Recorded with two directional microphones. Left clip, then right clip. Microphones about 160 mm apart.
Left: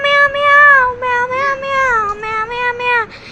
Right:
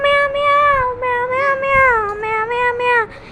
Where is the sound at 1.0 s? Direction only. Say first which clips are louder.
Left 2 dB; 20° right (ahead or behind).